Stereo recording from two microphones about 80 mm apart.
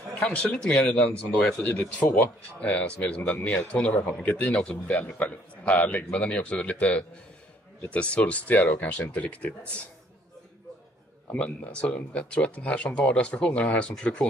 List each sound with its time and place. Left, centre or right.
0.1 s a man's voice: centre
11.2 s speech: centre